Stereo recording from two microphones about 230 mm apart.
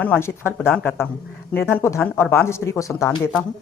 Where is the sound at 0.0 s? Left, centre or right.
Centre.